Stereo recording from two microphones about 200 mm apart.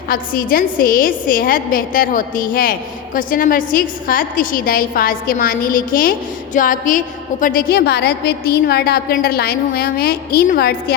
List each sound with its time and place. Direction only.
0.1 s a woman's voice: 45° left (ahead or behind)